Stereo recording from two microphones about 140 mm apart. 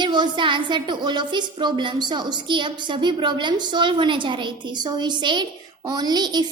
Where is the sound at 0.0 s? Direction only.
35° right (ahead or behind).